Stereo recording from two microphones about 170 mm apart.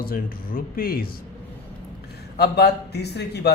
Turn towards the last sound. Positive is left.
turn(degrees=75)  # may be behind; listen again after turning